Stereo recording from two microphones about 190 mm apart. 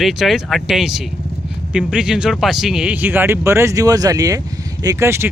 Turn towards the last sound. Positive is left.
turn(degrees=-15)  # may be behind; listen again after turning